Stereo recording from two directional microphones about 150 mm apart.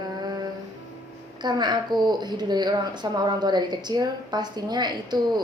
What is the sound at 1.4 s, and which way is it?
A woman's voice, 30° right (ahead or behind).